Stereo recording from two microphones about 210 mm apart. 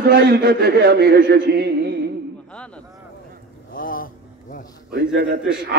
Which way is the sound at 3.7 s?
40° left (ahead or behind).